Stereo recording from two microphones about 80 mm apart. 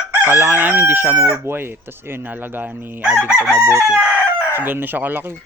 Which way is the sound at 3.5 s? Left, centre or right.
Centre.